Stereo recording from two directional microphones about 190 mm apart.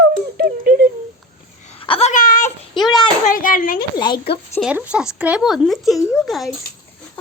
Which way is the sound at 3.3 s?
45° left (ahead or behind).